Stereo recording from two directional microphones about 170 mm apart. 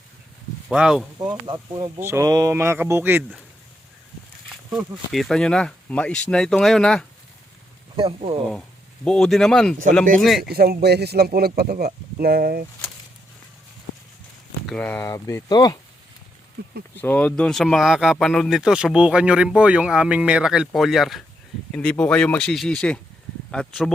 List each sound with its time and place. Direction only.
0.7 s speech: 5° right (ahead or behind)
1.5 s speech: 25° right (ahead or behind)
4.7 s speech: centre (ahead or behind)
7.9 s speech: 35° right (ahead or behind)
9.0 s speech: centre (ahead or behind)
10.5 s speech: 65° right (ahead or behind)
14.7 s speech: 10° left (ahead or behind)
17.0 s speech: 10° left (ahead or behind)